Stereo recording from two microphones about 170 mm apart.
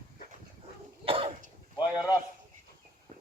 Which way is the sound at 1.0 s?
30° right (ahead or behind).